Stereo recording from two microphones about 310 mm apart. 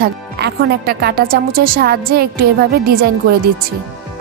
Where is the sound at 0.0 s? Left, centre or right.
Right.